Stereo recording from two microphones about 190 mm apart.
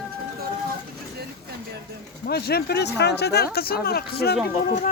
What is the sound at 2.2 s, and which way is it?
Speech, 55° left (ahead or behind).